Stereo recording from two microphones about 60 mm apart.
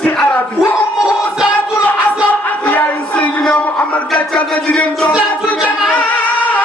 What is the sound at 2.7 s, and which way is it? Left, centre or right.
Music, left.